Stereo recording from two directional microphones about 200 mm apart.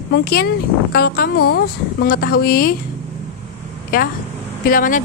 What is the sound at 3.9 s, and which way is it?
A woman's voice, 45° left (ahead or behind).